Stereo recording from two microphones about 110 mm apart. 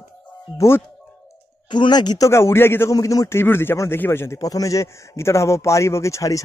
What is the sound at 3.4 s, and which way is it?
Speech, 20° left (ahead or behind).